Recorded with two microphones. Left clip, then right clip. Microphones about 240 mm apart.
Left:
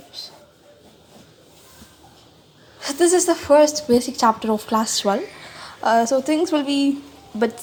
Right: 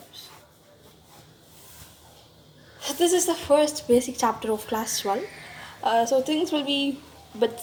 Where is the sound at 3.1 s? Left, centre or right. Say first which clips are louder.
Left 7 dB; left.